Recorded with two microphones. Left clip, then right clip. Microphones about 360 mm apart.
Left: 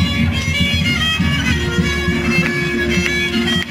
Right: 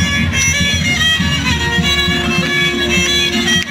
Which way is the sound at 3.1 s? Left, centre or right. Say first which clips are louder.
Right 4 dB; centre.